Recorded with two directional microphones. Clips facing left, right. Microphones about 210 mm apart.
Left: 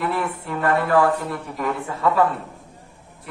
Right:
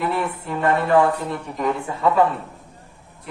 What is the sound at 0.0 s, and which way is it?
Speech, 25° right (ahead or behind).